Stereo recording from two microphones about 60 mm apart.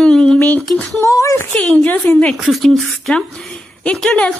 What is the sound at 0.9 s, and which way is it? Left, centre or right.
Speech, left.